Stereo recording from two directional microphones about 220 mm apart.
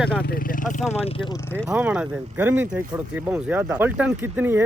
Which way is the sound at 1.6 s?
5° right (ahead or behind).